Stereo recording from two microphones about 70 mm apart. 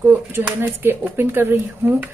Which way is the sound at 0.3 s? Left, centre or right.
Right.